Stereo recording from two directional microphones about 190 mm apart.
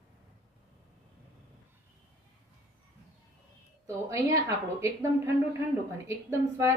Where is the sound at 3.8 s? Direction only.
15° right (ahead or behind).